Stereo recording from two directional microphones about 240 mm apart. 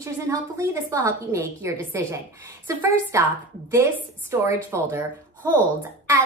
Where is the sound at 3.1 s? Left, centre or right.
Centre.